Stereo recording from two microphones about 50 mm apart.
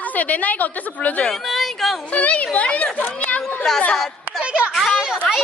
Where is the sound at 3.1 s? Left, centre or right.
Left.